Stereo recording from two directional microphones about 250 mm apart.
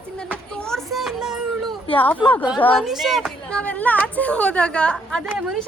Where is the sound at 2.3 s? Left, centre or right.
Centre.